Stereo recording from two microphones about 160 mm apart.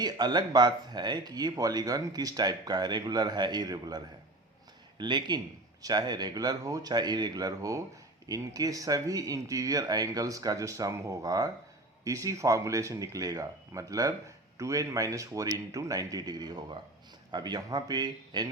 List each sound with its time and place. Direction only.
0.0 s speech: 25° right (ahead or behind)